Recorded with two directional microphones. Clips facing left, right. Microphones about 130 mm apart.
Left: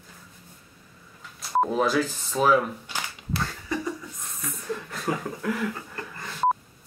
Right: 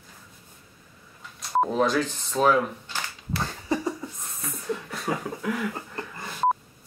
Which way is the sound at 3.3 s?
30° right (ahead or behind).